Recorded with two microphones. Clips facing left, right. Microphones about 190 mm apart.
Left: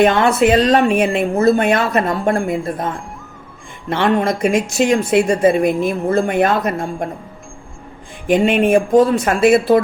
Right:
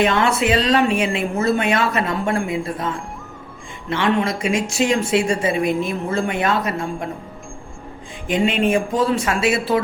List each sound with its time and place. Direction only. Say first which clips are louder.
0.0 s speech: left 5 dB; 45° left (ahead or behind)
1.3 s speech: left 8 dB; 35° left (ahead or behind)
1.5 s speech: left 4 dB; 50° left (ahead or behind)
8.3 s speech: left 5 dB; 55° left (ahead or behind)